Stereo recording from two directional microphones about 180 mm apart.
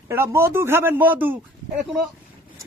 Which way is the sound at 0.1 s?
15° right (ahead or behind).